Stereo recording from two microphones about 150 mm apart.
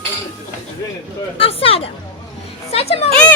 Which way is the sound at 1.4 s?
40° left (ahead or behind).